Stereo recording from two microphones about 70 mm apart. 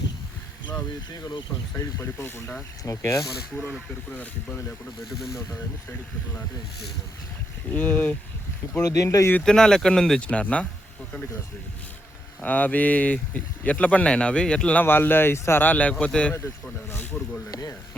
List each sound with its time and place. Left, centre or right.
1.8 s speech: left
4.1 s speech: left
7.7 s speech: left
8.8 s speech: left
9.4 s speech: centre
12.4 s speech: left
14.8 s speech: left; by 17.3 s centre